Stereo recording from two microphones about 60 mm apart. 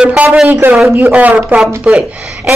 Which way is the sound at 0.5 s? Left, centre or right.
Right.